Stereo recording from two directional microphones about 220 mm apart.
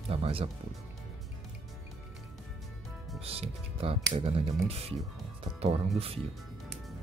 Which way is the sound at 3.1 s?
25° right (ahead or behind).